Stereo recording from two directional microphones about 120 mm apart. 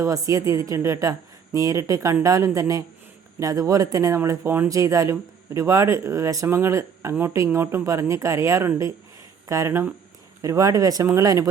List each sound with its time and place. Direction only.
0.0 s speech: 25° right (ahead or behind)